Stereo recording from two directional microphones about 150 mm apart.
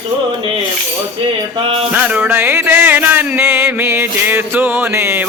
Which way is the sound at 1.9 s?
10° right (ahead or behind).